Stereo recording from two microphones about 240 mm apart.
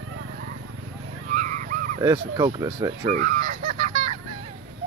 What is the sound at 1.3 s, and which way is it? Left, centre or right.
Vehicle, right.